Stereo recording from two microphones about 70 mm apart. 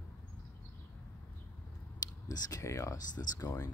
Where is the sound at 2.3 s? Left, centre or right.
Left.